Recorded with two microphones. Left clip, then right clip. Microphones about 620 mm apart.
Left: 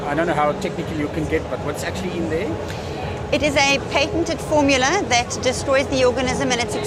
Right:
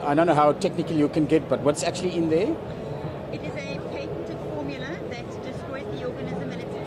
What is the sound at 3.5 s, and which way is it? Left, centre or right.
Speech, left.